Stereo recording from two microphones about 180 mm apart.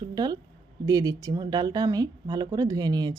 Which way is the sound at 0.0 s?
20° right (ahead or behind).